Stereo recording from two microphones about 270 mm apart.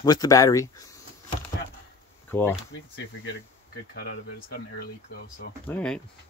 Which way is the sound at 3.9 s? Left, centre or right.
Left.